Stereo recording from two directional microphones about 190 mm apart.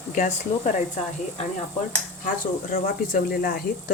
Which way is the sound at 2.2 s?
45° left (ahead or behind).